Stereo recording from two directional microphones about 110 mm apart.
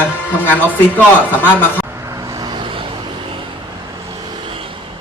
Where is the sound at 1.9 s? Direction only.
25° right (ahead or behind); by 4.8 s 55° right (ahead or behind).